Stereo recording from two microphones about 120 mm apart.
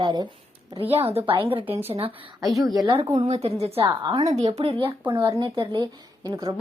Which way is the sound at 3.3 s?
60° right (ahead or behind).